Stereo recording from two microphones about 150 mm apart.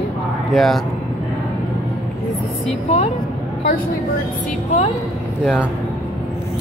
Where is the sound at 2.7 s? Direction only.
45° left (ahead or behind).